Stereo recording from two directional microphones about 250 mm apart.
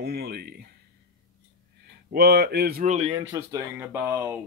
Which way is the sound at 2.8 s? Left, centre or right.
Right.